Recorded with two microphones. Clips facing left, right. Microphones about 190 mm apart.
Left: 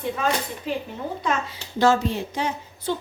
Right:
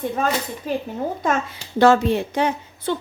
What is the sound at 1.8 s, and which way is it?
Speech, 60° right (ahead or behind).